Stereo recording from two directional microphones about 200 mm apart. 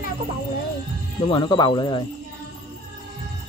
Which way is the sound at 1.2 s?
25° left (ahead or behind).